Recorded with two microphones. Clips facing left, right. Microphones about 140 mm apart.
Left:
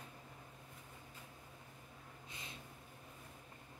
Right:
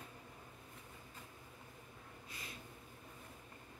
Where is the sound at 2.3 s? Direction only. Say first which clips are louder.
Right 1 dB; 25° left (ahead or behind).